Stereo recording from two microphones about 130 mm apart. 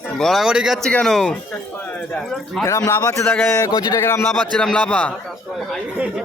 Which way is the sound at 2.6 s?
25° left (ahead or behind).